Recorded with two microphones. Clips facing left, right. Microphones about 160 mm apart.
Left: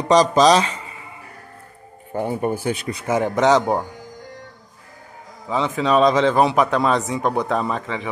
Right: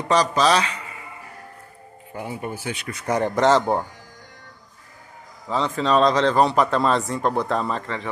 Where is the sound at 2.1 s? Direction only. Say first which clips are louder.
Left 8 dB; 50° left (ahead or behind).